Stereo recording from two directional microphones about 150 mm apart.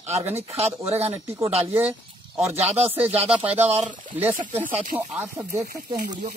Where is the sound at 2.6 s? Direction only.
45° right (ahead or behind).